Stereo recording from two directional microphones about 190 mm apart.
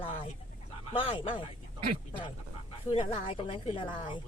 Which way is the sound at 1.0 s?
25° left (ahead or behind).